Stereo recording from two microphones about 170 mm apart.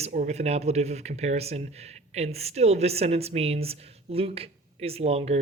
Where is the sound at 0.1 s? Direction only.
45° right (ahead or behind).